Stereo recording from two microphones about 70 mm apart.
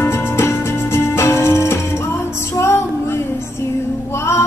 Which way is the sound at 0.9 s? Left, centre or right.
Left.